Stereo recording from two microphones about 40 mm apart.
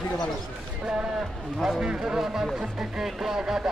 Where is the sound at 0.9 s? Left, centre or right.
Right.